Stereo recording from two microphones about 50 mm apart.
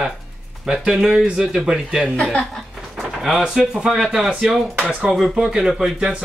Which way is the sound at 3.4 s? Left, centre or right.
Centre.